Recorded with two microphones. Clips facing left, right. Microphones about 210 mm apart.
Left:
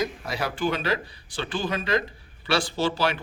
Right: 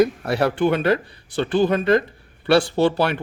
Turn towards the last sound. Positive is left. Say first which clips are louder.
# right 6 dB
turn(degrees=-60)  # may be behind; listen again after turning